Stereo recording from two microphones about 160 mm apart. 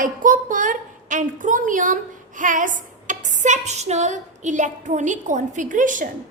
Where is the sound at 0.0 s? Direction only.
55° right (ahead or behind).